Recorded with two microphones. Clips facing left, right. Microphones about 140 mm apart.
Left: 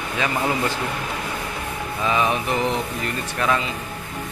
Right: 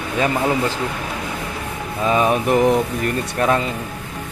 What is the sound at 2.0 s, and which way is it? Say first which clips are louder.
Speech: right 5 dB; 40° right (ahead or behind).